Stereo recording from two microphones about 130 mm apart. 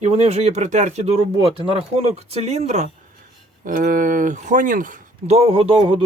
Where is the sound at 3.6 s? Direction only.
90° right.